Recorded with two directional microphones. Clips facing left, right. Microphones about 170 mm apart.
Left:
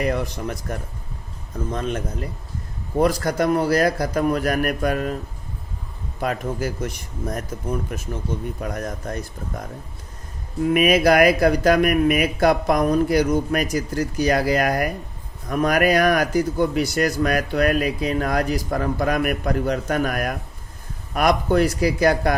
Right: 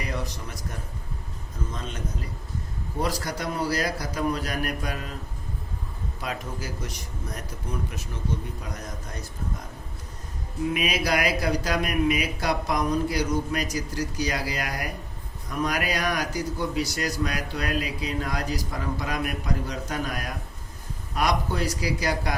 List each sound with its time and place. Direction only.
0.0 s a man's voice: 60° left (ahead or behind)
3.0 s speech: 50° left (ahead or behind)
6.1 s a man's voice: 50° left (ahead or behind)
10.8 s a man's voice: 55° left (ahead or behind)